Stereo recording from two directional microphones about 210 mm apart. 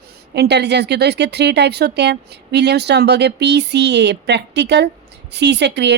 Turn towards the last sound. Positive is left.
turn(degrees=-55)  # may be behind; listen again after turning